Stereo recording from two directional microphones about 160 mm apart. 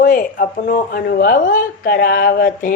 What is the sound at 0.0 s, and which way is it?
A woman's voice, 60° left (ahead or behind).